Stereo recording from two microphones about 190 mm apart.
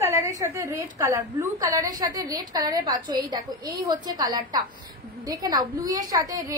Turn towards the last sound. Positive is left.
turn(degrees=-20)  # may be behind; listen again after turning